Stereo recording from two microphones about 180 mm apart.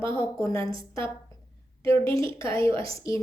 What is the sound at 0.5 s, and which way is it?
Speech, 30° right (ahead or behind).